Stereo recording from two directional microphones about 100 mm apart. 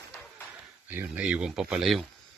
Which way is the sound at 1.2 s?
10° right (ahead or behind).